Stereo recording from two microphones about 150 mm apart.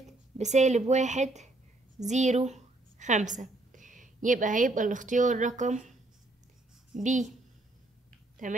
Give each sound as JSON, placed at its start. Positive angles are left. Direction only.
{"t": 0.4, "sound": "a woman's voice", "side_deg": -50}
{"t": 8.4, "sound": "speech", "side_deg": -60}